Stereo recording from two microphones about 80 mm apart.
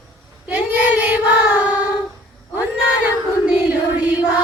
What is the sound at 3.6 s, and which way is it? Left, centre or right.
Music, centre.